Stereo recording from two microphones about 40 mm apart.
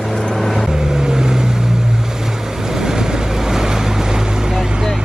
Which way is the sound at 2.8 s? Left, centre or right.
Centre.